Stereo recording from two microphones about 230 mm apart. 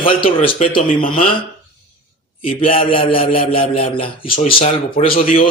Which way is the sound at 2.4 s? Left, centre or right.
Left.